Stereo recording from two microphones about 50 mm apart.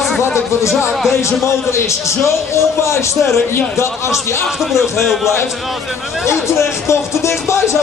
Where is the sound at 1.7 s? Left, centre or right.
Left.